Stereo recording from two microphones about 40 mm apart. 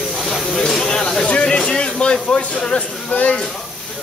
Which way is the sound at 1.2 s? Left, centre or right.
Left.